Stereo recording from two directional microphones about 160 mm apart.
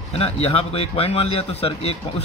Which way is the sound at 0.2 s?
35° left (ahead or behind).